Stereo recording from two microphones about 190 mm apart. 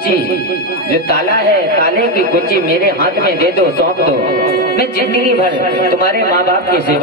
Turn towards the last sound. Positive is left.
turn(degrees=-50)  # may be behind; listen again after turning